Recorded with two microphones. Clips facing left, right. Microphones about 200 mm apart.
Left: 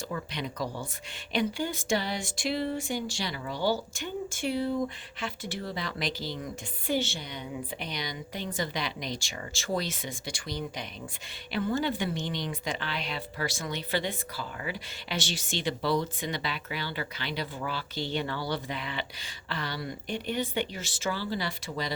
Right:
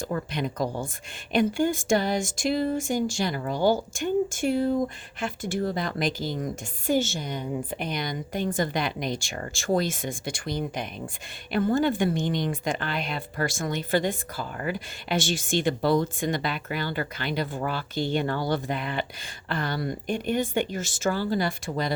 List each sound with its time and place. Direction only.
0.1 s speech: 50° right (ahead or behind)